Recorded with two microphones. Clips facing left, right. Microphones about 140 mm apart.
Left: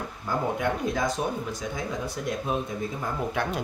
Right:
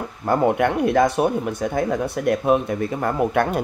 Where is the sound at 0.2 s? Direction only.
65° right (ahead or behind).